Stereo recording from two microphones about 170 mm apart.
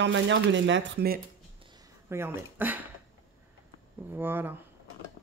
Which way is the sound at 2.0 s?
15° right (ahead or behind).